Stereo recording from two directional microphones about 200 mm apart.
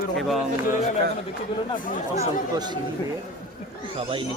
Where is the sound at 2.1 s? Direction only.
20° right (ahead or behind).